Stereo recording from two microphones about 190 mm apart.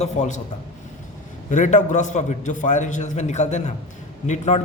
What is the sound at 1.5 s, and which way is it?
A man's voice, 40° left (ahead or behind).